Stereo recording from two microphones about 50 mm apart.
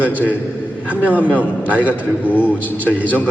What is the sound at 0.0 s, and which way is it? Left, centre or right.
A man's voice, left.